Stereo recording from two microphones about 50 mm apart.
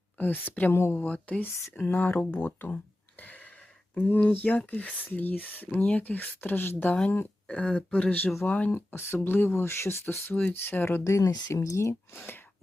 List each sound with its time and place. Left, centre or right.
0.2 s speech: left
0.7 s speech: left
1.0 s speech: left
1.9 s speech: left
3.2 s a sound: left
3.9 s speech: left
7.4 s speech: left
8.4 s speech: left
11.0 s speech: left
12.1 s speech: left